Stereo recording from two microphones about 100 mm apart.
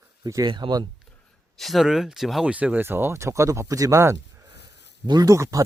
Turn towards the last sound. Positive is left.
turn(degrees=-30)  # may be behind; listen again after turning